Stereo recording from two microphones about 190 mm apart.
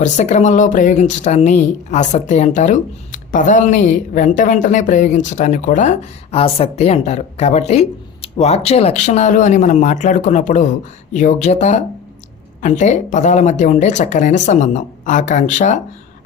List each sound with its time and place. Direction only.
0.0 s speech: 40° left (ahead or behind)